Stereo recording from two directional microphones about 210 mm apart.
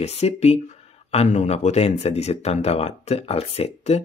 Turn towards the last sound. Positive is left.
turn(degrees=30)  # may be behind; listen again after turning